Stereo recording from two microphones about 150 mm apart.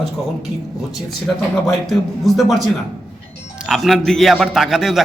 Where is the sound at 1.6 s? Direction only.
Centre (ahead or behind).